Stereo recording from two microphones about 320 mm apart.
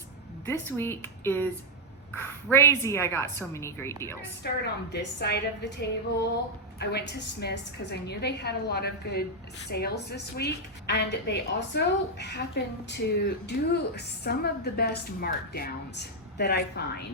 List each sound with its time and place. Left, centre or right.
0.4 s a woman's voice: centre
4.4 s a woman's voice: left